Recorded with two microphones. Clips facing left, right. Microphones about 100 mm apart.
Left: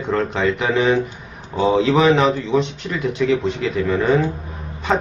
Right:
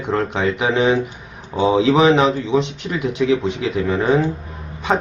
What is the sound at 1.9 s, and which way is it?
Speech, 20° right (ahead or behind).